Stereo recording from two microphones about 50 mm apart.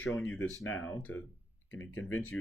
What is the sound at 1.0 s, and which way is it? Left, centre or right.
Speech, left.